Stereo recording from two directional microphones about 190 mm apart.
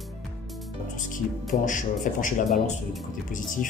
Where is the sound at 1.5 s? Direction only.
40° left (ahead or behind).